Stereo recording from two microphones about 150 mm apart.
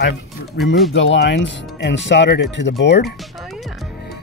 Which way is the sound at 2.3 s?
90° left.